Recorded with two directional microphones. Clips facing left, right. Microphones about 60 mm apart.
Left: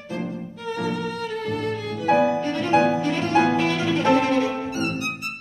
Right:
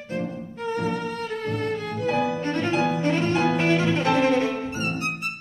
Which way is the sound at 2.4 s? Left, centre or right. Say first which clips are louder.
Left 4 dB; right.